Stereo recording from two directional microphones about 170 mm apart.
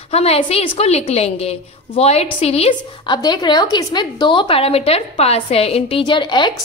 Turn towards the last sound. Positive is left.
turn(degrees=25)  # may be behind; listen again after turning